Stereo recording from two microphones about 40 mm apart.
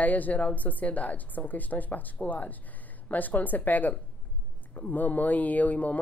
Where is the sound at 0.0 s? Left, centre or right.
Left.